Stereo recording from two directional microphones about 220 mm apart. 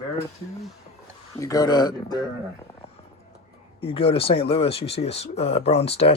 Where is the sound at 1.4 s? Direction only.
15° left (ahead or behind).